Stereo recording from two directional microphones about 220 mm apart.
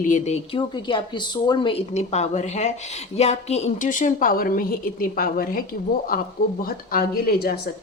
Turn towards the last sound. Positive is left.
turn(degrees=45)  # may be behind; listen again after turning